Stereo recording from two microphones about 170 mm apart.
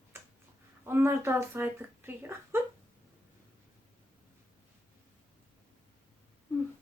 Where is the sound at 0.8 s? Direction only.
15° right (ahead or behind).